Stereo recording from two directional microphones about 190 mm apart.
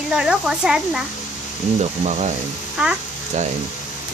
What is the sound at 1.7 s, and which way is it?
Speech, 35° right (ahead or behind).